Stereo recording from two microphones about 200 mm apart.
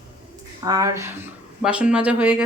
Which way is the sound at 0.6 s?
15° right (ahead or behind).